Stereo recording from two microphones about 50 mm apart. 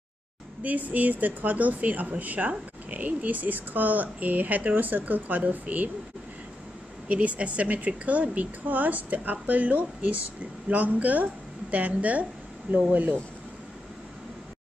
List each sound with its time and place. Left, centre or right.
0.6 s speech: right
7.1 s a woman's voice: right